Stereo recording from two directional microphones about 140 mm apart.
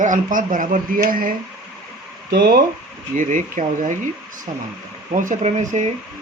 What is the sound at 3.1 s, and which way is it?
Speech, 65° right (ahead or behind).